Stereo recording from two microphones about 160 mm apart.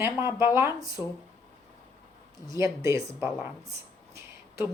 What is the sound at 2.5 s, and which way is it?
A woman's voice, 20° right (ahead or behind).